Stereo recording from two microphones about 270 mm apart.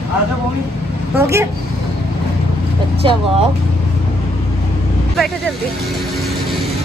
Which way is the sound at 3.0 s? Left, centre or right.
Centre.